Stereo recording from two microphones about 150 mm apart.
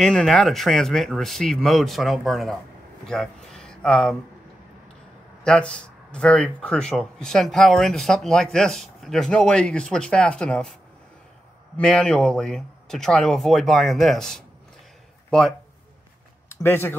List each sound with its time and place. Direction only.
0.0 s speech: 5° left (ahead or behind)
5.4 s speech: 5° left (ahead or behind)
11.7 s speech: 5° left (ahead or behind)
16.6 s speech: 15° left (ahead or behind)